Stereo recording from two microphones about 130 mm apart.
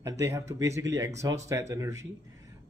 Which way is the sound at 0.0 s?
20° right (ahead or behind).